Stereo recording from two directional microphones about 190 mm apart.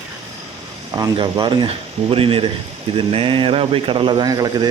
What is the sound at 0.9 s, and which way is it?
Speech, 20° right (ahead or behind).